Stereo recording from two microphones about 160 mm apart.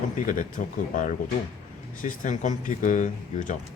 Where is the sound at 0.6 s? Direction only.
55° left (ahead or behind).